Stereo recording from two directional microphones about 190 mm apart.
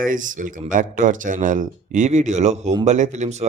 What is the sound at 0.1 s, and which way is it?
Speech, 45° right (ahead or behind).